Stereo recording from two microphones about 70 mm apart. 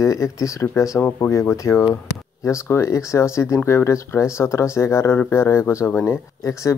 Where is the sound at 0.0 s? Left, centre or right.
Left.